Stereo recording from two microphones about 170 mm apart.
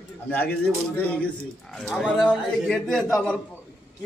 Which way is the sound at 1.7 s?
5° left (ahead or behind).